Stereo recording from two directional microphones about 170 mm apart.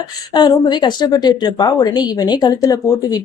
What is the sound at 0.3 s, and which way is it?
A woman's voice, 25° left (ahead or behind).